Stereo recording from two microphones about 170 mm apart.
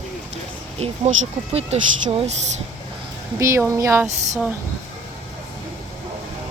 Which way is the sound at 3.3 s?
15° right (ahead or behind).